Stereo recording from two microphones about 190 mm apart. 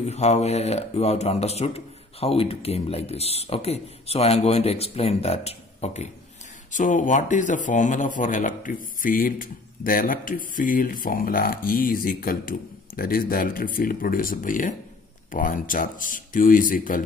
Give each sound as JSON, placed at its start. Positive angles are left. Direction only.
{"t": 0.0, "sound": "speech", "side_deg": 35}